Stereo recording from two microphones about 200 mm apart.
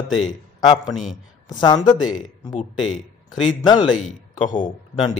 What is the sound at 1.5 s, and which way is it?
Speech, 20° left (ahead or behind).